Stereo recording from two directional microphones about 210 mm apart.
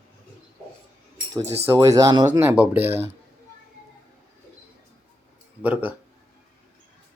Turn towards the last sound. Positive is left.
turn(degrees=-10)  # may be behind; listen again after turning